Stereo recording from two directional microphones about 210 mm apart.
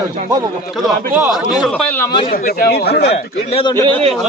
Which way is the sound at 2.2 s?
45° left (ahead or behind).